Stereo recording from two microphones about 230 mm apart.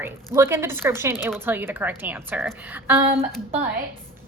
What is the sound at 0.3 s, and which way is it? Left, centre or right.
A woman's voice, centre.